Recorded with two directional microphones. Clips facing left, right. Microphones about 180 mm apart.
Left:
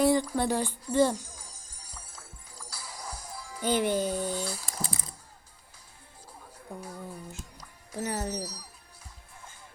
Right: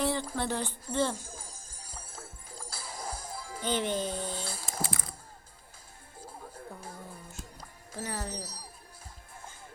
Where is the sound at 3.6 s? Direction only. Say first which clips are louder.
Left 4 dB; 10° left (ahead or behind).